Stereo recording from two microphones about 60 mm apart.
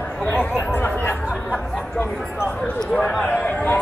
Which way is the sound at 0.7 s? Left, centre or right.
Left.